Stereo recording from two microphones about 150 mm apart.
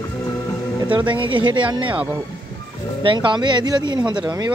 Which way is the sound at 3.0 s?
30° right (ahead or behind).